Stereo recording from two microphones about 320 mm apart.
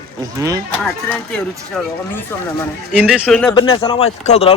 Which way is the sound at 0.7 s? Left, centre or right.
Centre.